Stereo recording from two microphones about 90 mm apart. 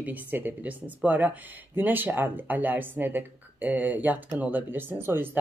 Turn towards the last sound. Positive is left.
turn(degrees=-25)  # may be behind; listen again after turning